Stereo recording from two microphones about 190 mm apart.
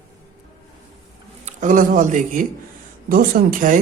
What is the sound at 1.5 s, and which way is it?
Speech, 40° right (ahead or behind).